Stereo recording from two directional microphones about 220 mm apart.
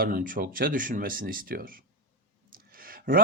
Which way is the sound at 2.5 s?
40° right (ahead or behind).